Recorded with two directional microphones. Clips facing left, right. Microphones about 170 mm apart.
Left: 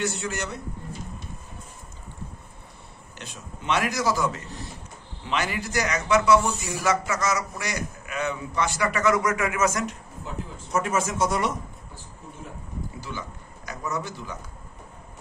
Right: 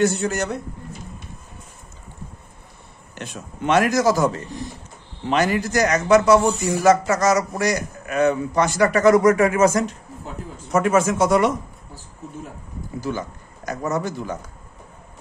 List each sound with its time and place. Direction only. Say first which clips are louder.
0.0 s a man's voice: right 9 dB; 45° right (ahead or behind)
3.2 s a man's voice: right 10 dB; 50° right (ahead or behind)
10.7 s speech: right 8 dB; 65° right (ahead or behind)
13.1 s a man's voice: right 9 dB; 50° right (ahead or behind)